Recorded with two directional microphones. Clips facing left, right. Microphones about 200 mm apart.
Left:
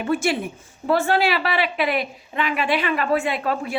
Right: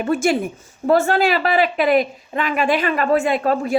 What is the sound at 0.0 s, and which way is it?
A woman's voice, 45° right (ahead or behind).